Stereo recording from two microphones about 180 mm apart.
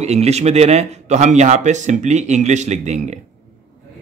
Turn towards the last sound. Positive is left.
turn(degrees=-40)  # may be behind; listen again after turning